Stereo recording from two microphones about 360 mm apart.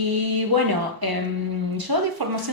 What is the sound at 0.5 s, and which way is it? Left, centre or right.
Speech, right.